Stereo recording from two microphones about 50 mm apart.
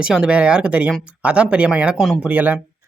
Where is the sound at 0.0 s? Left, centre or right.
Centre.